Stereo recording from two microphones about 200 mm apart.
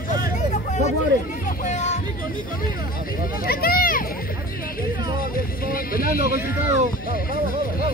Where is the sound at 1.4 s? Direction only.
40° left (ahead or behind).